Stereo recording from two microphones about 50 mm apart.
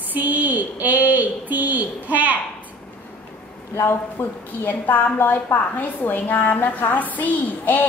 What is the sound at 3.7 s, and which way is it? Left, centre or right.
A woman's voice, left.